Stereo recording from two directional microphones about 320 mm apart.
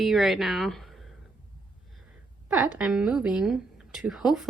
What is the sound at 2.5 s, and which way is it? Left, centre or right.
A woman's voice, centre.